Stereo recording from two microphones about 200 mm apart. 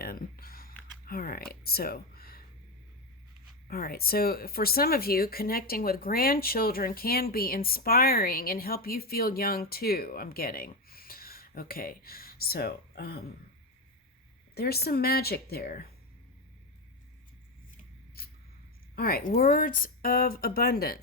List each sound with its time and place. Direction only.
0.0 s a sound: 45° left (ahead or behind)
3.7 s speech: 50° left (ahead or behind)
14.5 s speech: 50° left (ahead or behind)
18.9 s speech: 50° left (ahead or behind)